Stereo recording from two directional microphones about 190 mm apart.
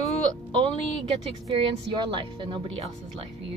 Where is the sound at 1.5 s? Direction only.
25° right (ahead or behind).